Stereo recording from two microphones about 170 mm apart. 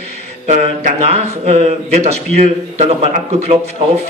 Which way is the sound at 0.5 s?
40° right (ahead or behind).